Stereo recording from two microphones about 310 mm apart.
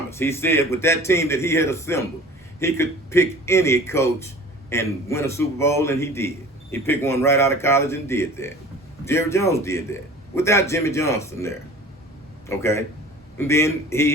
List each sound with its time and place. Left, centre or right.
0.1 s a man's voice: centre